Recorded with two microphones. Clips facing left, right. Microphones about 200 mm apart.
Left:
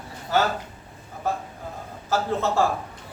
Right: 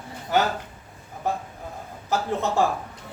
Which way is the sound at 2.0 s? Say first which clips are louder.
Left 1 dB; 15° right (ahead or behind).